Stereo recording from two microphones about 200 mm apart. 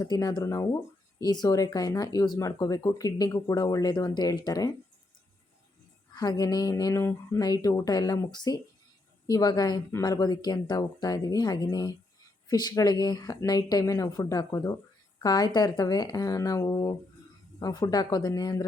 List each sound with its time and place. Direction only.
0.0 s speech: 20° left (ahead or behind)
6.1 s speech: 20° left (ahead or behind)